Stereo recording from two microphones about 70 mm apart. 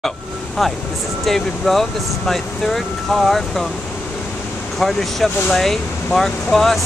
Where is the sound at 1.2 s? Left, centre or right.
Centre.